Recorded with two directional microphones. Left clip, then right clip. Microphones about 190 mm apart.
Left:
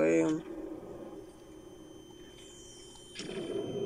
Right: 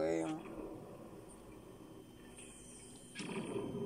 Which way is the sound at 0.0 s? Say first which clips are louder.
Left 10 dB; 50° left (ahead or behind).